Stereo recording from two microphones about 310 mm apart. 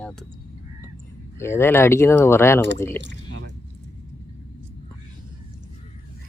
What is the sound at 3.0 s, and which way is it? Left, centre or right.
Speech, right.